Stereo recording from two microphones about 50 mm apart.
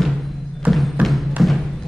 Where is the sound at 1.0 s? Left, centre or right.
Right.